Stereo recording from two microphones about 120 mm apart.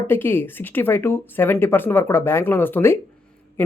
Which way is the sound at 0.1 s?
20° left (ahead or behind).